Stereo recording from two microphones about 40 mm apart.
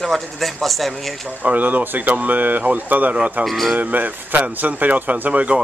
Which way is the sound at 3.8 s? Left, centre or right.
Right.